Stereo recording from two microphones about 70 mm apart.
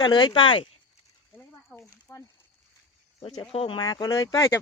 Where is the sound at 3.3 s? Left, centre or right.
Left.